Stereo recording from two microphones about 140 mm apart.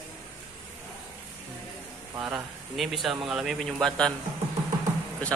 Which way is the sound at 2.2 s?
Centre (ahead or behind).